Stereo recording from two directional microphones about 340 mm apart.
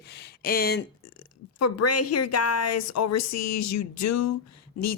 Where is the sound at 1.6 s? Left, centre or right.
Left.